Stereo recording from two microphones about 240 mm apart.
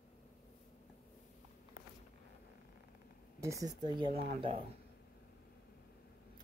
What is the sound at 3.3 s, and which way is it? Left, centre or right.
Speech, centre.